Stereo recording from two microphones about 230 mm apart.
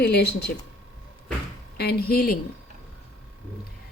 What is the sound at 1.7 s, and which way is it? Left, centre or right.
Speech, left.